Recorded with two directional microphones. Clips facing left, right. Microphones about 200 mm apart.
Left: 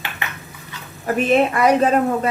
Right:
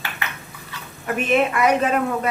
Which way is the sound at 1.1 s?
35° left (ahead or behind).